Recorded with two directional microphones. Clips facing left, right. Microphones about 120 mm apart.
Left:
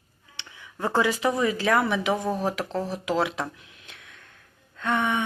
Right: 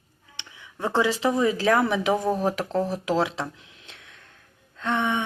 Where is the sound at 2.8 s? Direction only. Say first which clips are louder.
Right 2 dB; 40° right (ahead or behind).